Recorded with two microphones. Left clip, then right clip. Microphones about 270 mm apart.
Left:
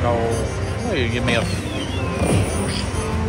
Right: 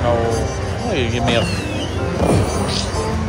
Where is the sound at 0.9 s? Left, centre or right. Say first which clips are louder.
Right 2 dB; centre.